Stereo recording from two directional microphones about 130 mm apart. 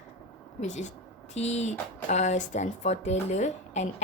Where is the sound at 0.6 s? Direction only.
60° left (ahead or behind).